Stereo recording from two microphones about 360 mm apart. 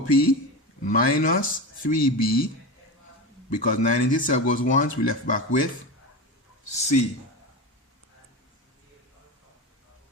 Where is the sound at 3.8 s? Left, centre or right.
Left.